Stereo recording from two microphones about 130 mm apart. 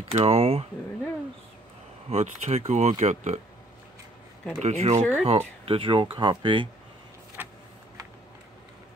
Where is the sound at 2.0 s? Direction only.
55° right (ahead or behind).